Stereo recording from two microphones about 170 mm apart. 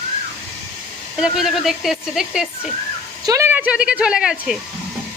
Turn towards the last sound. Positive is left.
turn(degrees=-5)  # may be behind; listen again after turning